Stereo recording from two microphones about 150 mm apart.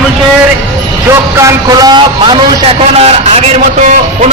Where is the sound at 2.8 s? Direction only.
45° right (ahead or behind).